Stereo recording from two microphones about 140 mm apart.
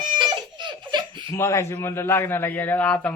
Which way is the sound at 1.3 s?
20° left (ahead or behind).